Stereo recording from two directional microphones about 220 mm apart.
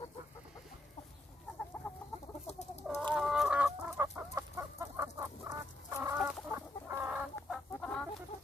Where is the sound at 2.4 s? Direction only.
30° left (ahead or behind).